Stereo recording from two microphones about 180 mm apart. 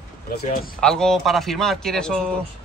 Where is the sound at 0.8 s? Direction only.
5° left (ahead or behind).